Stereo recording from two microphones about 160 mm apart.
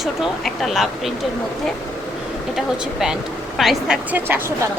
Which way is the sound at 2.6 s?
5° right (ahead or behind).